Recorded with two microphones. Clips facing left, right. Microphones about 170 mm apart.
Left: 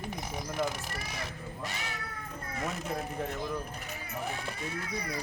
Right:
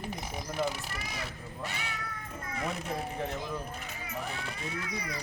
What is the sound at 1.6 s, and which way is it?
Speech, 40° left (ahead or behind).